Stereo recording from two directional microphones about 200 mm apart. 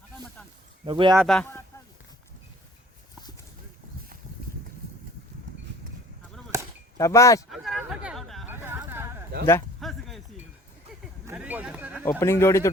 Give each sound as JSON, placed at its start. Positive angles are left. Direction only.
{"t": 0.9, "sound": "a man's voice", "side_deg": -25}
{"t": 1.2, "sound": "speech", "side_deg": 5}
{"t": 6.5, "sound": "chop", "side_deg": -15}
{"t": 6.9, "sound": "speech", "side_deg": 15}
{"t": 7.5, "sound": "chatter", "side_deg": 0}
{"t": 8.4, "sound": "a sound", "side_deg": -10}
{"t": 9.8, "sound": "a sound", "side_deg": 0}
{"t": 11.3, "sound": "speech", "side_deg": -10}
{"t": 12.2, "sound": "speech", "side_deg": 15}